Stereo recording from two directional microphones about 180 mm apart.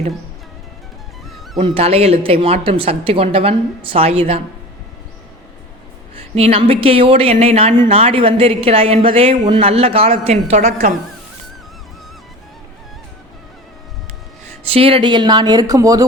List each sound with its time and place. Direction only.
1.5 s speech: 35° right (ahead or behind)
6.3 s speech: 35° right (ahead or behind)
14.7 s speech: 30° right (ahead or behind)